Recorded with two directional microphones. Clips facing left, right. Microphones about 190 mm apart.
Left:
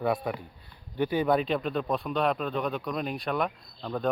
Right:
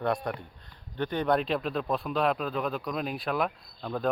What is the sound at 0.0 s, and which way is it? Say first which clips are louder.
Speech: left 1 dB; 5° left (ahead or behind).